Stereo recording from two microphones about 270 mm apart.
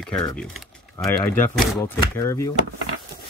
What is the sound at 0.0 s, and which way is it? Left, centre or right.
Speech, centre.